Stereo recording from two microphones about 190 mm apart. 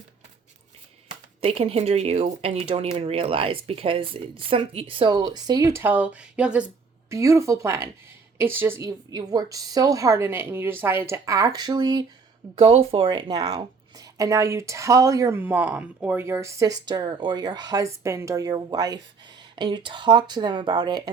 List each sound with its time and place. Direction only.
1.4 s speech: 30° right (ahead or behind)